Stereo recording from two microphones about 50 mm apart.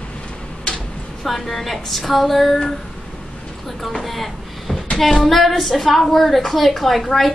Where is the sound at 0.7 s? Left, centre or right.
Centre.